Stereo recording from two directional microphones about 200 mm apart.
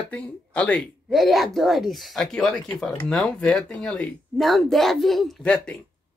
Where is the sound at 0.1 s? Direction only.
5° left (ahead or behind).